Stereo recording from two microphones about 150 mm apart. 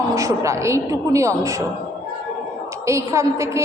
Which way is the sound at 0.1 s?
20° right (ahead or behind).